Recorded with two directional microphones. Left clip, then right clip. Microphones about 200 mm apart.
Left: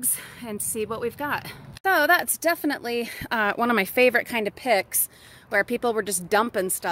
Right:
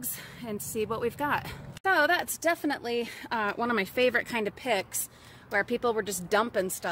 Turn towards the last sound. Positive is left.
turn(degrees=30)  # may be behind; listen again after turning